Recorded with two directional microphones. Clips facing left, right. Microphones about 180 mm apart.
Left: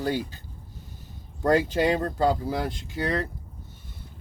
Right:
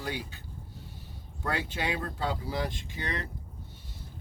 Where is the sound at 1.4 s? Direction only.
40° left (ahead or behind).